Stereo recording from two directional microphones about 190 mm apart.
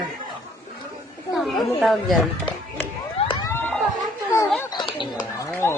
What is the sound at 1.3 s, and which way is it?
Speech, centre (ahead or behind).